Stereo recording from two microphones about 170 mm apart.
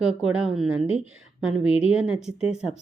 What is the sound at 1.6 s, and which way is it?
Speech, 35° left (ahead or behind).